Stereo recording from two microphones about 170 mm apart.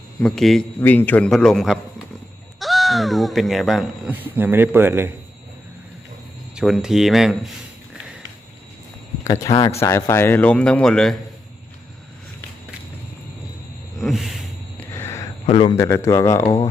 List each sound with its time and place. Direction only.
0.2 s speech: 5° left (ahead or behind); by 5.1 s 15° right (ahead or behind)
6.6 s speech: 5° right (ahead or behind)
9.4 s speech: 20° left (ahead or behind); by 11.1 s 5° left (ahead or behind)
14.0 s a sound: centre (ahead or behind)
14.8 s a sound: 15° left (ahead or behind)
15.4 s speech: 30° left (ahead or behind)
15.7 s speech: 15° left (ahead or behind)